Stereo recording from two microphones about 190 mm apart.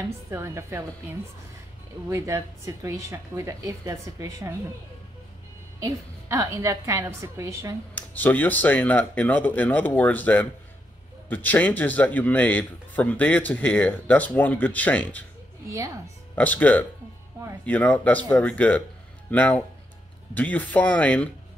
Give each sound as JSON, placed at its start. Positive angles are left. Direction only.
{"t": 0.3, "sound": "speech", "side_deg": -15}
{"t": 5.9, "sound": "speech", "side_deg": -15}
{"t": 7.9, "sound": "a man's voice", "side_deg": 10}
{"t": 16.3, "sound": "a man's voice", "side_deg": 10}